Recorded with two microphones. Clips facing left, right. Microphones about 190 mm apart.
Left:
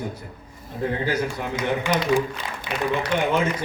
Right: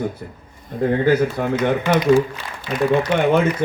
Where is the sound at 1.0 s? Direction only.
55° right (ahead or behind).